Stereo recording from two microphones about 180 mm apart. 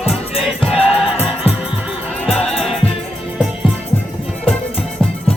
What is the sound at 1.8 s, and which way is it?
Music, 5° left (ahead or behind).